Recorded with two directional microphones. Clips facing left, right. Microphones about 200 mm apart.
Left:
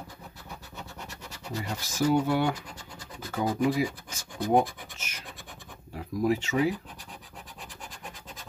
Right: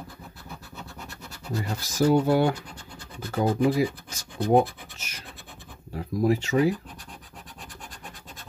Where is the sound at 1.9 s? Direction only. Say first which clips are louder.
Right 4 dB; 35° right (ahead or behind).